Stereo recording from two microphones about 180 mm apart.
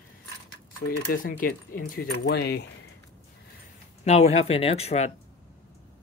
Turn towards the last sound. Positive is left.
turn(degrees=35)  # may be behind; listen again after turning